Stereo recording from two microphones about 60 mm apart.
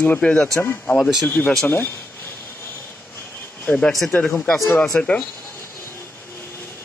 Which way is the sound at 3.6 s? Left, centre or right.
Left.